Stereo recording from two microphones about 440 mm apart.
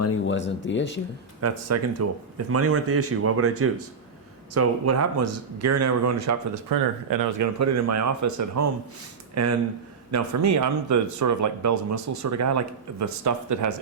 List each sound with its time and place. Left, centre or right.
0.0 s speech: left
1.4 s speech: right